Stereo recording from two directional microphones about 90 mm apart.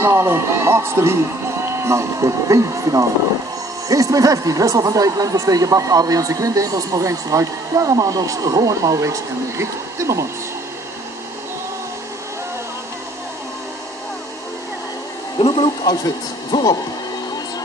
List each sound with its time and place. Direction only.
0.0 s speech: 30° right (ahead or behind)
15.3 s a sound: 85° left
15.8 s speech: 50° left (ahead or behind)